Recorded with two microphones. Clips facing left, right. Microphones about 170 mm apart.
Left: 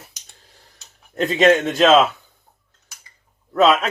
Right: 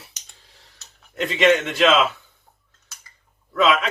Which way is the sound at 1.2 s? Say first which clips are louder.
Left 3 dB; 40° left (ahead or behind).